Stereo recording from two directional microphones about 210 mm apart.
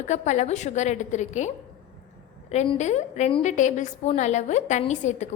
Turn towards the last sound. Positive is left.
turn(degrees=35)  # may be behind; listen again after turning